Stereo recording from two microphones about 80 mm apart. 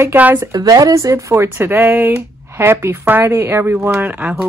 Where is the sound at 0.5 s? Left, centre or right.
Right.